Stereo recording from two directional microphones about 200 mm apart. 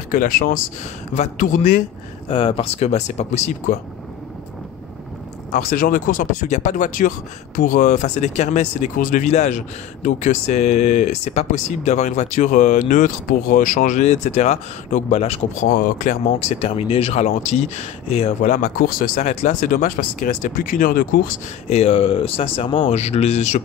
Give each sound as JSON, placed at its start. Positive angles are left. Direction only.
{"t": 0.1, "sound": "speech", "side_deg": 45}
{"t": 2.2, "sound": "speech", "side_deg": 25}
{"t": 5.5, "sound": "speech", "side_deg": 40}
{"t": 15.6, "sound": "speech", "side_deg": 40}
{"t": 21.6, "sound": "speech", "side_deg": 30}